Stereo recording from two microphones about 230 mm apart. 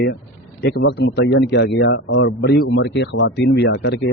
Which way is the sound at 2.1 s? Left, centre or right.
Left.